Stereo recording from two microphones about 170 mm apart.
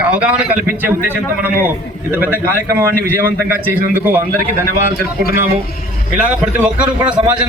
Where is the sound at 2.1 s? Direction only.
10° right (ahead or behind).